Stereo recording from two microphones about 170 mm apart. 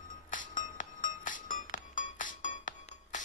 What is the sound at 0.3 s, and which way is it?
Music, 50° left (ahead or behind).